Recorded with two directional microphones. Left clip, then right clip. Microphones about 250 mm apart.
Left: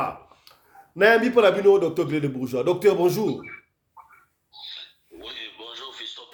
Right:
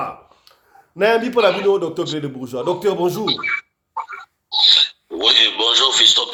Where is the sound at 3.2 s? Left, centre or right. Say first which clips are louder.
Right 9 dB; right.